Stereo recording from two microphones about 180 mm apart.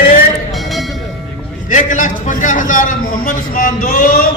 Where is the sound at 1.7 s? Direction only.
45° left (ahead or behind).